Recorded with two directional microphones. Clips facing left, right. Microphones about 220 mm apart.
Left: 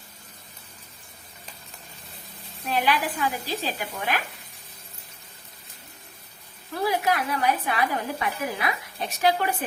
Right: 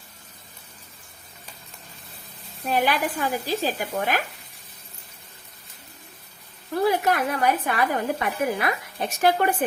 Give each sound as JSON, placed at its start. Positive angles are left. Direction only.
{"t": 2.6, "sound": "a woman's voice", "side_deg": -45}
{"t": 7.0, "sound": "a woman's voice", "side_deg": -50}